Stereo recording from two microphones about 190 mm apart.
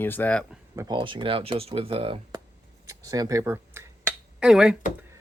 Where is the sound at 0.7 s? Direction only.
20° right (ahead or behind).